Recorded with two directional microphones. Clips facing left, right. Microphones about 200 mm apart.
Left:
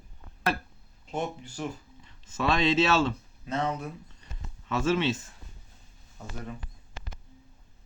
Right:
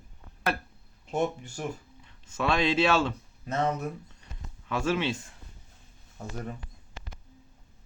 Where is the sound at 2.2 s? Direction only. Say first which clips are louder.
Left 1 dB; 10° right (ahead or behind).